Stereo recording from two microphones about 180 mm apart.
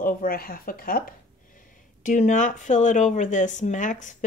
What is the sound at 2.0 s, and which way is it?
Speech, 45° left (ahead or behind).